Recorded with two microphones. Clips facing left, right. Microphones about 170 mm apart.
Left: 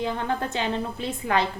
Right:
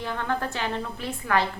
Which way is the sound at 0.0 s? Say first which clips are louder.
Left 2 dB; 20° left (ahead or behind).